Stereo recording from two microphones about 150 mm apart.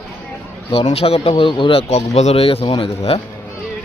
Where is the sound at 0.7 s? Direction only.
40° left (ahead or behind).